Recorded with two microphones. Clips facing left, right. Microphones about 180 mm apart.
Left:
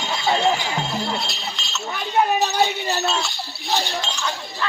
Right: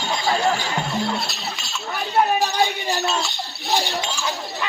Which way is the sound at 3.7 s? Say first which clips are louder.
Right 1 dB; 10° right (ahead or behind).